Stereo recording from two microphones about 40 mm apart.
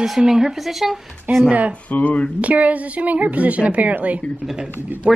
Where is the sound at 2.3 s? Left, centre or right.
Right.